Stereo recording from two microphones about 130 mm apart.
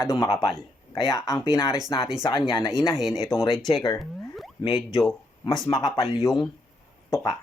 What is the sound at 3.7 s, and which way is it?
Speech, 30° left (ahead or behind).